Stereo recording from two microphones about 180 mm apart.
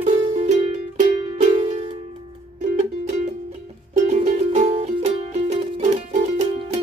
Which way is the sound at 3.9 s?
40° right (ahead or behind).